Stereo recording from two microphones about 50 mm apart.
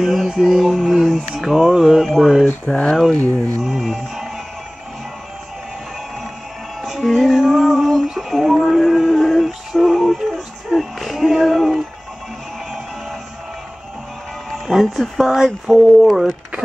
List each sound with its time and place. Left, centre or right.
0.0 s mantra: centre
2.4 s speech: left
3.2 s a sound: right
3.6 s music: centre
7.0 s music: centre
14.7 s speech: centre